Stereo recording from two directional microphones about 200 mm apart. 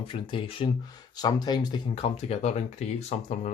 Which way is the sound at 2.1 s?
35° left (ahead or behind).